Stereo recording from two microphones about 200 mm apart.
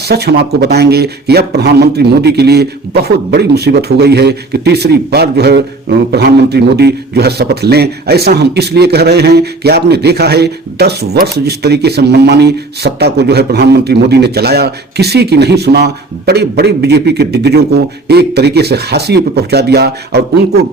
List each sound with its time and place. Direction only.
0.1 s speech: 55° right (ahead or behind)